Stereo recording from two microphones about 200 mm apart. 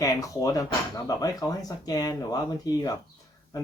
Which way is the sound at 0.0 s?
15° left (ahead or behind).